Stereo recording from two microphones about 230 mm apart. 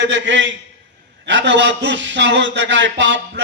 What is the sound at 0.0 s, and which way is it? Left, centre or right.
Speech, right.